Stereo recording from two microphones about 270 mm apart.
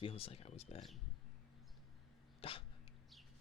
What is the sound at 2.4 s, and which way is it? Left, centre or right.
Dog, left.